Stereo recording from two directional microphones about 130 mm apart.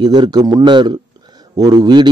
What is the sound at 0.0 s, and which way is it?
A man's voice, 35° right (ahead or behind).